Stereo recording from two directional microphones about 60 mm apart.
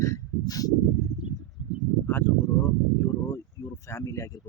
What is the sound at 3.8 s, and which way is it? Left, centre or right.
Speech, left.